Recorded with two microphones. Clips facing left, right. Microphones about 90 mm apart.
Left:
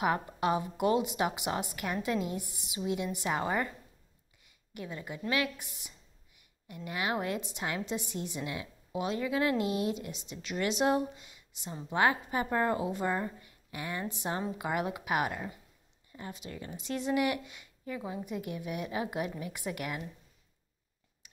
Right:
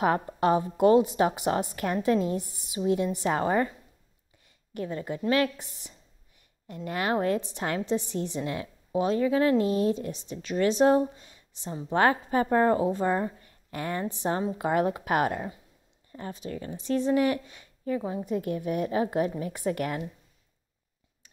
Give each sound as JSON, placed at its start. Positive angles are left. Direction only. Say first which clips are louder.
{"t": 0.0, "sound": "a woman's voice", "louder": "right 5 dB", "side_deg": -35}
{"t": 4.7, "sound": "a woman's voice", "louder": "right 8 dB", "side_deg": -40}
{"t": 6.7, "sound": "a woman's voice", "louder": "right 6 dB", "side_deg": -45}
{"t": 8.2, "sound": "a woman's voice", "louder": "right 6 dB", "side_deg": -40}
{"t": 13.4, "sound": "a sound", "louder": "right 6 dB", "side_deg": -45}
{"t": 14.1, "sound": "a woman's voice", "louder": "right 6 dB", "side_deg": -30}